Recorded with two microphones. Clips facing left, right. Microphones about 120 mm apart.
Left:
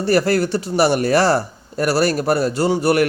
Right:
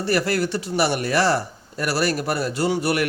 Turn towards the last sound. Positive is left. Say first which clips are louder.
# left 5 dB
turn(degrees=40)  # may be behind; listen again after turning